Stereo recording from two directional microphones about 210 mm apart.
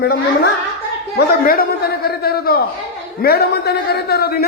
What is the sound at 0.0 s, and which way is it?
Speech, 50° left (ahead or behind).